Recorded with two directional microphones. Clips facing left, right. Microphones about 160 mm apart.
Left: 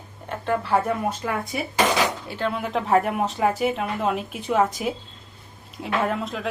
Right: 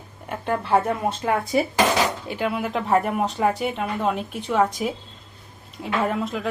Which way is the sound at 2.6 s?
Centre (ahead or behind).